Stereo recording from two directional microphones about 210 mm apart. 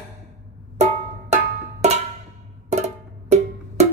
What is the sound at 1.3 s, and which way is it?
Cowbell, 30° right (ahead or behind).